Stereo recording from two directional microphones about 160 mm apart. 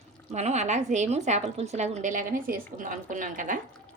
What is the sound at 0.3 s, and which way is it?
A woman's voice, 45° right (ahead or behind).